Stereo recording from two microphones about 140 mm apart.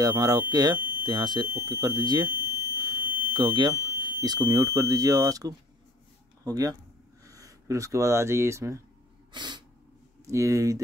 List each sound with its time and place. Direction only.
0.0 s speech: 25° right (ahead or behind)
2.3 s fire alarm: 20° right (ahead or behind)
3.3 s speech: 35° right (ahead or behind)
9.3 s sneeze: 30° right (ahead or behind)
10.2 s speech: 20° right (ahead or behind)